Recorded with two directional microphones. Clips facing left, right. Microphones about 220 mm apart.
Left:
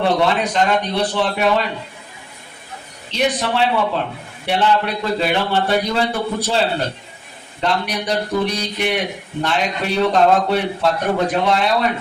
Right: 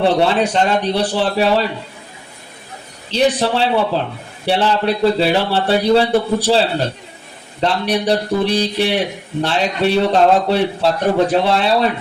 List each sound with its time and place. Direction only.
0.0 s a man's voice: 30° right (ahead or behind)
3.1 s a man's voice: 30° right (ahead or behind)
7.6 s a man's voice: 30° right (ahead or behind)